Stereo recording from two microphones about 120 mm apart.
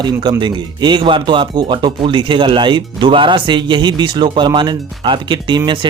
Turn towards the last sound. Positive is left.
turn(degrees=-40)  # may be behind; listen again after turning